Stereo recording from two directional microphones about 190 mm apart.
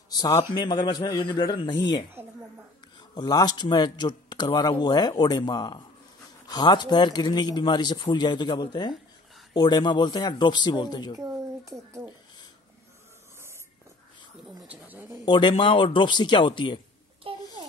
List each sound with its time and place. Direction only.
0.1 s speech: 20° left (ahead or behind)
2.2 s speech: 10° right (ahead or behind)
3.0 s speech: 20° left (ahead or behind)
11.7 s speech: 15° right (ahead or behind)
14.7 s speech: 10° right (ahead or behind)
15.2 s speech: 25° left (ahead or behind)
17.3 s a sound: 30° right (ahead or behind)